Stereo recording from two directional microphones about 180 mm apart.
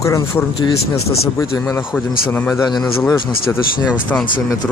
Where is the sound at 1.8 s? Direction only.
5° right (ahead or behind).